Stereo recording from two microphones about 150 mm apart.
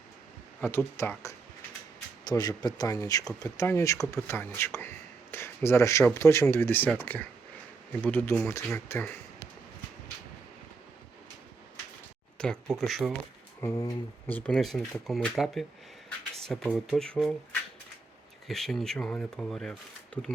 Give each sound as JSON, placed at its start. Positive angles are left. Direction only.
{"t": 0.6, "sound": "speech", "side_deg": 15}
{"t": 12.4, "sound": "speech", "side_deg": 5}
{"t": 13.6, "sound": "speech", "side_deg": 20}
{"t": 14.3, "sound": "speech", "side_deg": 10}
{"t": 18.4, "sound": "speech", "side_deg": 0}